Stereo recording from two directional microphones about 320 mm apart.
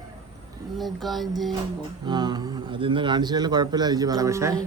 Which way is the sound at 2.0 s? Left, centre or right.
Centre.